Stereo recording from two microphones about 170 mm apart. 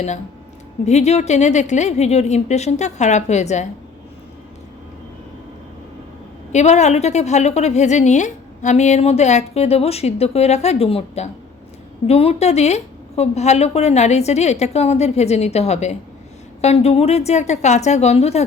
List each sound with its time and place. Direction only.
0.9 s a woman's voice: 40° left (ahead or behind)
6.5 s a woman's voice: 40° left (ahead or behind)